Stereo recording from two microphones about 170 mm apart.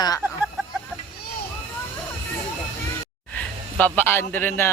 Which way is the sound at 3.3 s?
10° left (ahead or behind).